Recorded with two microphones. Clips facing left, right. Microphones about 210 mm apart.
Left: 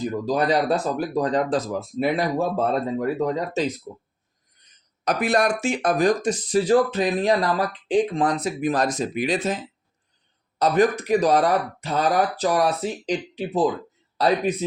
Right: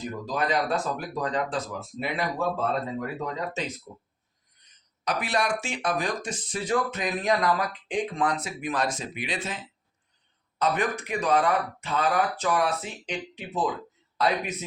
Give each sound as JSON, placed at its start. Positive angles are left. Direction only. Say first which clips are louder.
{"t": 0.0, "sound": "speech", "louder": "left 7 dB", "side_deg": 35}
{"t": 5.0, "sound": "speech", "louder": "left 6 dB", "side_deg": 45}